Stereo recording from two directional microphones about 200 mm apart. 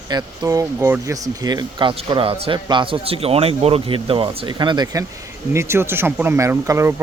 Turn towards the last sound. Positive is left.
turn(degrees=-15)  # may be behind; listen again after turning